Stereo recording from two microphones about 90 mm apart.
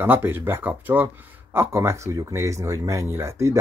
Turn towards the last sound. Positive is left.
turn(degrees=-30)  # may be behind; listen again after turning